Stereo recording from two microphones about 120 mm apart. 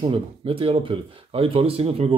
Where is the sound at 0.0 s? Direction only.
50° right (ahead or behind).